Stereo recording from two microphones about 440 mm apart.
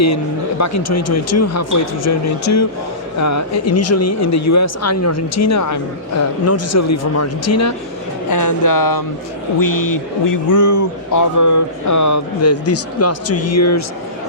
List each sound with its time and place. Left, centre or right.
0.6 s speech: left